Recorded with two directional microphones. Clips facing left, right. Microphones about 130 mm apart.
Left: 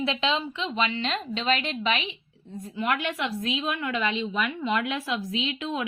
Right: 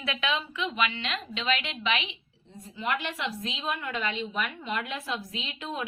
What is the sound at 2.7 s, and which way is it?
A woman's voice, 60° left (ahead or behind).